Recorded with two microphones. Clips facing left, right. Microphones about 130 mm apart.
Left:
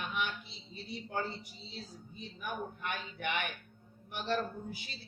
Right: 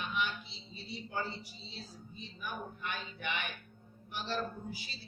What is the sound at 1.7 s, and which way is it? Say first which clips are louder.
A man's voice: left 3 dB; 60° left (ahead or behind).